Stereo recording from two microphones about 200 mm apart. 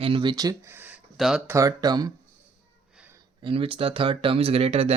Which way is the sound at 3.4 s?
25° right (ahead or behind).